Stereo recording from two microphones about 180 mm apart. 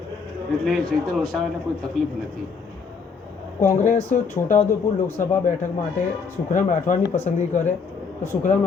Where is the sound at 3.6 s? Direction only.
45° left (ahead or behind).